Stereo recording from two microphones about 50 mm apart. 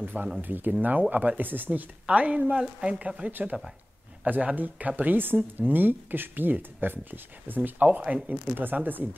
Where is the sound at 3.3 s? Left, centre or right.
Right.